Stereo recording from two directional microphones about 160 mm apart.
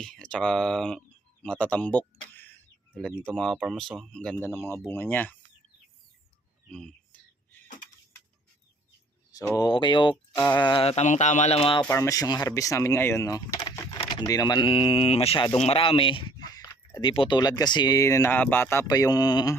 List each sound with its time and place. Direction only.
0.0 s speech: 5° left (ahead or behind)
3.3 s speech: centre (ahead or behind)
4.4 s speech: 15° left (ahead or behind)
6.7 s a sound: 5° left (ahead or behind)
9.3 s speech: 25° left (ahead or behind)
11.9 s speech: 20° left (ahead or behind)